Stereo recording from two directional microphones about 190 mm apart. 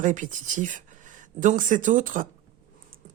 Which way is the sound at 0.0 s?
45° right (ahead or behind).